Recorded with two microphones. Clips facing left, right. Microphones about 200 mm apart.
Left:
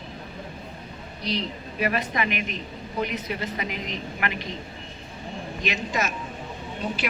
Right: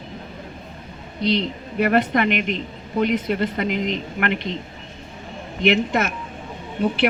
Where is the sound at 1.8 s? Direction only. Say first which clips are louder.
Right 8 dB; 60° right (ahead or behind).